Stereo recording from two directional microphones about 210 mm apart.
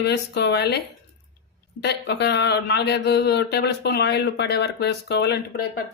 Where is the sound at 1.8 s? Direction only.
55° left (ahead or behind).